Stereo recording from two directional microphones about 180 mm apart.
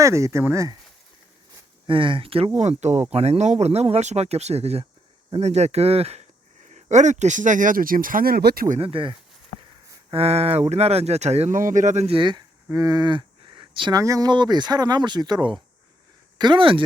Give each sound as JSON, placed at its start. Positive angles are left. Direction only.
{"t": 0.0, "sound": "speech", "side_deg": -15}
{"t": 1.9, "sound": "speech", "side_deg": -30}
{"t": 8.8, "sound": "speech", "side_deg": -30}